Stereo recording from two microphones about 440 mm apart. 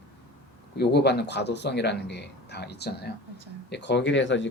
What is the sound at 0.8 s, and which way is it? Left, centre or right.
Speech, left.